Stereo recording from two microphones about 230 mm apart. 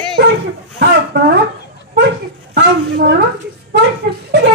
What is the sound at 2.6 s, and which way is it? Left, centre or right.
Speech, right.